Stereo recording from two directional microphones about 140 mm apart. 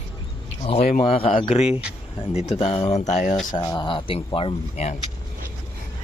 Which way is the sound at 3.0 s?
55° left (ahead or behind).